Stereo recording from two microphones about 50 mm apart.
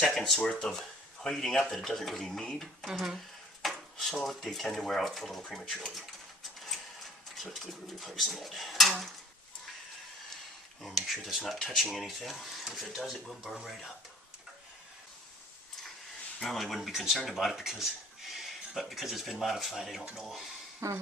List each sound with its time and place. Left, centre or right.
0.0 s speech: centre
0.3 s speech: left
0.6 s speech: centre
3.6 s drawer open or close: centre
4.5 s speech: centre
7.3 s speech: centre
10.8 s speech: centre
16.4 s speech: centre
20.8 s speech: right